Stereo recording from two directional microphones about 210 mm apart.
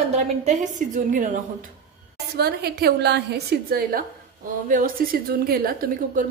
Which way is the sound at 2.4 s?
50° right (ahead or behind).